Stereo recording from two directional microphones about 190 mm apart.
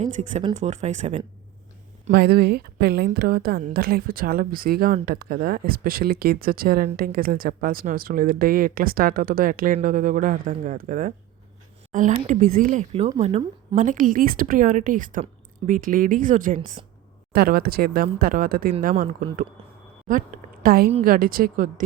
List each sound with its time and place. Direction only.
0.0 s speech: 35° right (ahead or behind)
2.0 s a woman's voice: 60° right (ahead or behind)
20.1 s a woman's voice: 45° right (ahead or behind)